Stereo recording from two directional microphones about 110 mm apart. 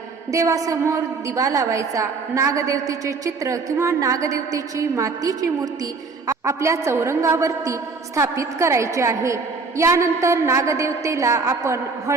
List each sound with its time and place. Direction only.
0.3 s a woman's voice: 30° right (ahead or behind)